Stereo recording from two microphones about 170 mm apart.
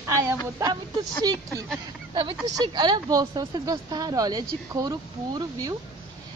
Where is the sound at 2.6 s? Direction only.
25° right (ahead or behind).